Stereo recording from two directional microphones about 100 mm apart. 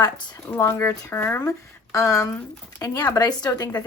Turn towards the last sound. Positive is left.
turn(degrees=30)  # may be behind; listen again after turning